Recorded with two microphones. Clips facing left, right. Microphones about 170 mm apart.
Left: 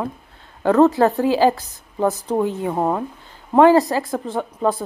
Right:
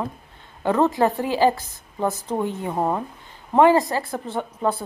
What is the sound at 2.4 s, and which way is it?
Speech, 15° left (ahead or behind).